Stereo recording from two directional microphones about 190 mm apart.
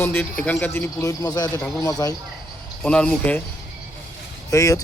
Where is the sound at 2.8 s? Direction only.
5° left (ahead or behind).